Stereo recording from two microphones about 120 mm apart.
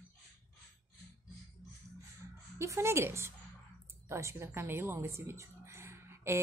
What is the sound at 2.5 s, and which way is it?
A woman's voice, 20° right (ahead or behind).